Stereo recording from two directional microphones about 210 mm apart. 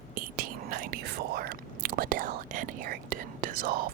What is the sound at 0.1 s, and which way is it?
Speech, 45° right (ahead or behind).